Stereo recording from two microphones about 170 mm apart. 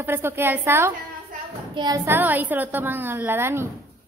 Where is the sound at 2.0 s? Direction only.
10° right (ahead or behind).